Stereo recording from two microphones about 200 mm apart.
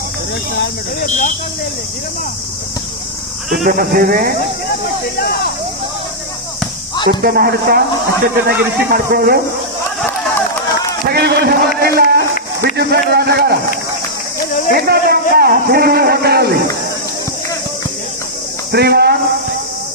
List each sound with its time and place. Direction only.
1.0 s speech: 40° left (ahead or behind)
3.5 s a man's voice: 45° right (ahead or behind)
6.9 s a sound: 20° left (ahead or behind)
7.2 s a man's voice: 50° right (ahead or behind)
11.0 s a man's voice: 50° right (ahead or behind)
14.7 s a man's voice: 50° right (ahead or behind)
18.7 s speech: 55° right (ahead or behind)